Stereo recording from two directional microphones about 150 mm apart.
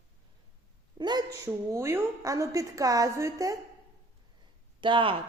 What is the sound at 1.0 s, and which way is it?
A woman's voice, 30° right (ahead or behind).